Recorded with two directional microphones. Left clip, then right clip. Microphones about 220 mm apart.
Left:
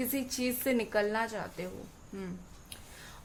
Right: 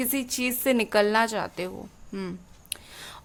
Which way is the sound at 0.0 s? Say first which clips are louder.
Right 6 dB; 35° right (ahead or behind).